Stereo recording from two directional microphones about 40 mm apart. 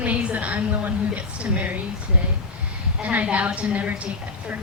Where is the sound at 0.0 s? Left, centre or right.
Right.